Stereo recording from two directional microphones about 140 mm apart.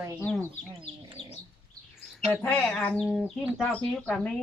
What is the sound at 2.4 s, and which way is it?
Speech, 5° left (ahead or behind).